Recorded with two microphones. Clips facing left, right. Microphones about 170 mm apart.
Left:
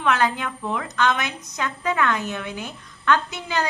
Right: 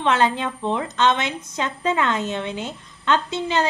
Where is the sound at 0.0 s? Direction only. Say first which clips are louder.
Right 2 dB; 25° right (ahead or behind).